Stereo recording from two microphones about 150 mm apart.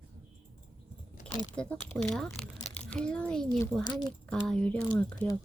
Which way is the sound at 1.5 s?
10° left (ahead or behind).